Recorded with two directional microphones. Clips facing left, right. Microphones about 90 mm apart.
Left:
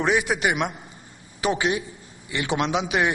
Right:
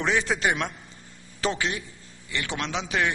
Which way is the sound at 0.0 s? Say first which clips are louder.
Left 3 dB; 15° left (ahead or behind).